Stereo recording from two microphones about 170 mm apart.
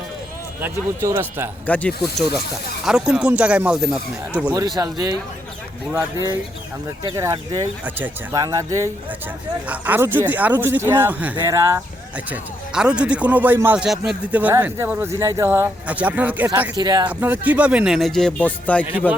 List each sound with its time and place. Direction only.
0.6 s speech: 15° right (ahead or behind)
1.6 s speech: 10° left (ahead or behind)
2.8 s speech: 5° right (ahead or behind)
4.8 s speech: 20° right (ahead or behind)
7.9 s speech: 10° right (ahead or behind)
16.7 s speech: 20° right (ahead or behind)
17.1 s speech: 10° right (ahead or behind); by 18.9 s 10° left (ahead or behind)
18.9 s speech: 10° right (ahead or behind)